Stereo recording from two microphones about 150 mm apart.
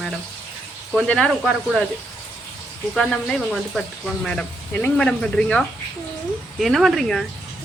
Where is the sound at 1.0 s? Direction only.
5° left (ahead or behind).